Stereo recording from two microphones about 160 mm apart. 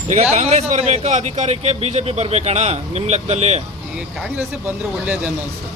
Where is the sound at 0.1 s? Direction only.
45° right (ahead or behind).